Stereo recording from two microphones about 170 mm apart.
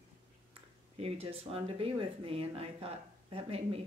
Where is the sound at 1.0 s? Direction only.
35° right (ahead or behind).